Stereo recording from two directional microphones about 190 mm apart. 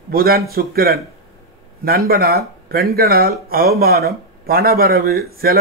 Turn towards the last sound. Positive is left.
turn(degrees=-50)  # may be behind; listen again after turning